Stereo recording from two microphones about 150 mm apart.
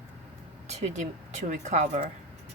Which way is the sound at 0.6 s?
50° right (ahead or behind).